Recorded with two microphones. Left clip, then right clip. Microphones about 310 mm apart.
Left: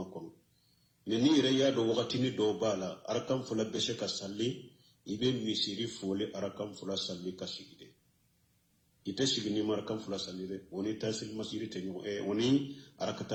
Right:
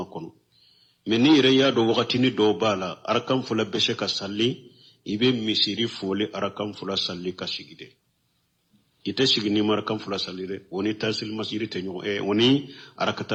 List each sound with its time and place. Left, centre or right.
1.0 s a man's voice: right
9.0 s a man's voice: right